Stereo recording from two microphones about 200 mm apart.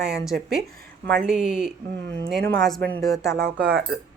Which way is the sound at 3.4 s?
50° right (ahead or behind).